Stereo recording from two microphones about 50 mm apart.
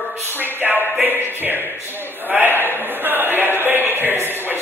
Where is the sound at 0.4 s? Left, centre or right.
Right.